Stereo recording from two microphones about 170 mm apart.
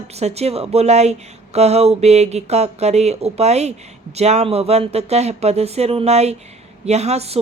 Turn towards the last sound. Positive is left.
turn(degrees=-40)  # may be behind; listen again after turning